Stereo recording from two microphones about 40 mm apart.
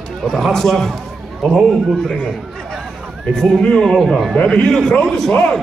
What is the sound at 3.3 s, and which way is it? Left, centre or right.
A man's voice, centre.